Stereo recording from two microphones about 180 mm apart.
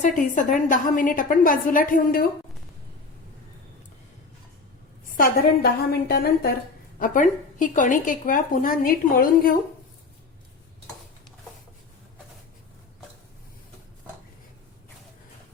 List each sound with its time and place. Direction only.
0.0 s a woman's voice: 45° left (ahead or behind)
5.0 s a sound: 50° left (ahead or behind)
5.9 s a woman's voice: 60° left (ahead or behind)
7.0 s a woman's voice: 45° left (ahead or behind)